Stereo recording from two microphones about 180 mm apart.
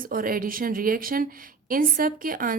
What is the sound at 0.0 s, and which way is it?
A woman's voice, 50° right (ahead or behind).